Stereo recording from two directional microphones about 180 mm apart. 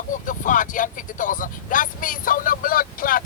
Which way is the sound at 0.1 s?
45° left (ahead or behind).